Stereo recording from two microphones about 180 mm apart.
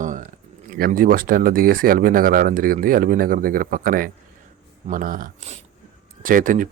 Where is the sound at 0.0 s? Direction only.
45° right (ahead or behind).